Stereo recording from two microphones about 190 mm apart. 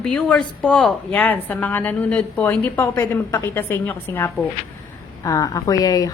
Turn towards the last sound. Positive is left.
turn(degrees=20)  # may be behind; listen again after turning